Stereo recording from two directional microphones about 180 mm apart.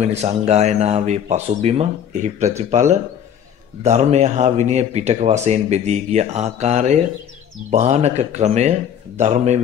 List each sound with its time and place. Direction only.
0.0 s speech: 40° right (ahead or behind)